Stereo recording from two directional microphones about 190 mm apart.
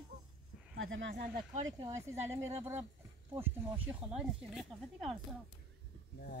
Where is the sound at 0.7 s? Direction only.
85° right.